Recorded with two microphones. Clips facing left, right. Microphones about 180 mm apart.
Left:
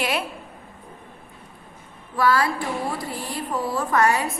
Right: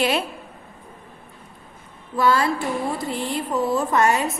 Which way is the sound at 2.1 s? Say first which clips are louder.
Right 1 dB; 25° right (ahead or behind).